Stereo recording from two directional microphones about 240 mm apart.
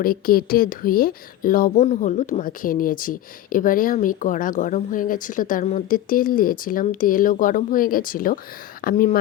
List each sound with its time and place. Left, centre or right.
0.0 s speech: left